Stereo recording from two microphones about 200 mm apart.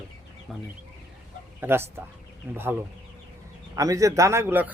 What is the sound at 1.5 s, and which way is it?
Speech, 10° right (ahead or behind).